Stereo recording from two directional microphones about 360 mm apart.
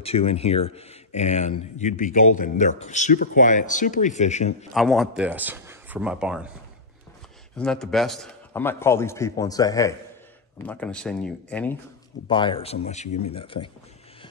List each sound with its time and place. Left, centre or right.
0.0 s a man's voice: centre
4.7 s speech: centre
7.5 s a man's voice: centre